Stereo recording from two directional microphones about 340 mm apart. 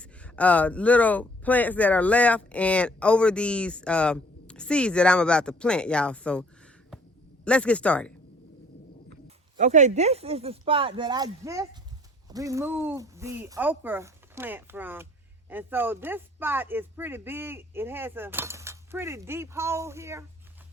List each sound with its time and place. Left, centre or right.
0.0 s speech: centre
7.4 s speech: centre
9.2 s speech: right